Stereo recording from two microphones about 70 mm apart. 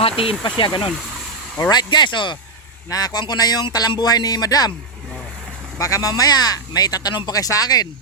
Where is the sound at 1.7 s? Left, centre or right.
Left.